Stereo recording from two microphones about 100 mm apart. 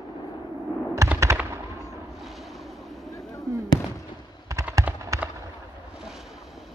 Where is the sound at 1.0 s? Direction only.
30° right (ahead or behind).